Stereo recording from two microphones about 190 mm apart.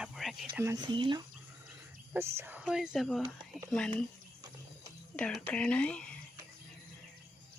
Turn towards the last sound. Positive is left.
turn(degrees=5)  # may be behind; listen again after turning